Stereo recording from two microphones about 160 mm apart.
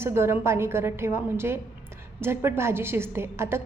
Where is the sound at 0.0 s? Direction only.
15° right (ahead or behind).